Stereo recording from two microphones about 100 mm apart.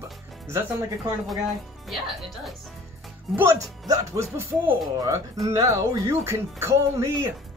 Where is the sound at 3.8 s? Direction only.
35° right (ahead or behind).